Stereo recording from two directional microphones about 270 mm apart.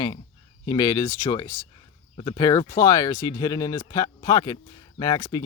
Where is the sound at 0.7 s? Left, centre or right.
Centre.